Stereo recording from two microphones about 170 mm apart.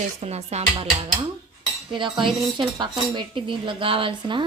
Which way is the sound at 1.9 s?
30° right (ahead or behind).